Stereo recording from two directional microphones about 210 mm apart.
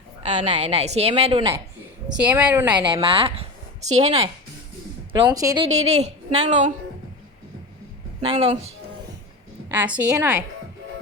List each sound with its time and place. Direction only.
0.3 s a woman's voice: 30° right (ahead or behind)
2.0 s a woman's voice: 5° right (ahead or behind)
2.7 s a woman's voice: 20° right (ahead or behind)
5.2 s a woman's voice: 15° right (ahead or behind)
5.7 s a woman's voice: 30° right (ahead or behind)
8.2 s a woman's voice: 30° right (ahead or behind)
9.6 s a woman's voice: 10° right (ahead or behind)